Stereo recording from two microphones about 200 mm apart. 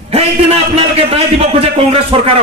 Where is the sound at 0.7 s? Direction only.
30° right (ahead or behind).